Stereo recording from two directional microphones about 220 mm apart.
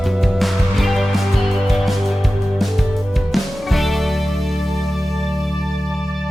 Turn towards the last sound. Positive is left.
turn(degrees=0)  # may be behind; listen again after turning